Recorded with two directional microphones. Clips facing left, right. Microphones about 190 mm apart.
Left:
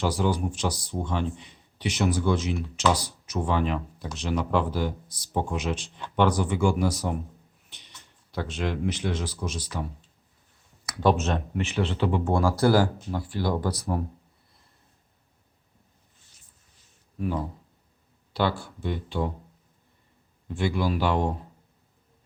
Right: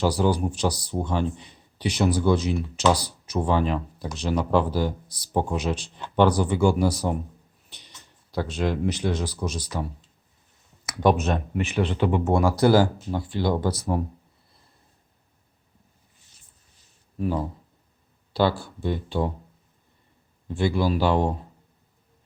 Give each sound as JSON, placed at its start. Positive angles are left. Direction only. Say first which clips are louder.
{"t": 0.0, "sound": "speech", "louder": "right 3 dB", "side_deg": -35}
{"t": 10.8, "sound": "speech", "louder": "right 2 dB", "side_deg": -15}
{"t": 17.2, "sound": "speech", "louder": "right 3 dB", "side_deg": -30}
{"t": 20.6, "sound": "speech", "louder": "right 3 dB", "side_deg": -30}